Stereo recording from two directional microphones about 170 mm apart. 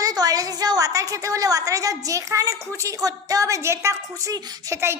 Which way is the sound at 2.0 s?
20° right (ahead or behind).